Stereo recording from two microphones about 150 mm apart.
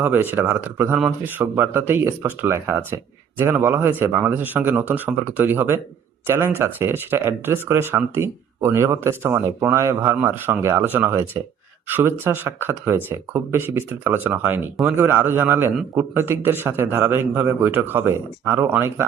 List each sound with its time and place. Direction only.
0.0 s speech: 15° right (ahead or behind)